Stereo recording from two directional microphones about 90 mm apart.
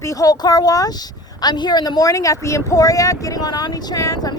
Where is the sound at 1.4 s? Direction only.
55° left (ahead or behind).